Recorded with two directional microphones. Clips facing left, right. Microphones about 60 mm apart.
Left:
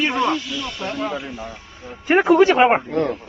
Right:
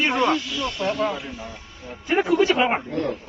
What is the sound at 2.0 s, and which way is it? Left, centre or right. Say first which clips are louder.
Speech: left 6 dB; left.